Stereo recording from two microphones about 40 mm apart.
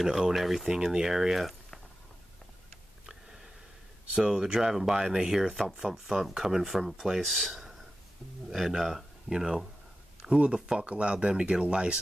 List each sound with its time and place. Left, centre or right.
0.0 s speech: centre
0.7 s speech: centre
4.1 s speech: centre
10.2 s speech: right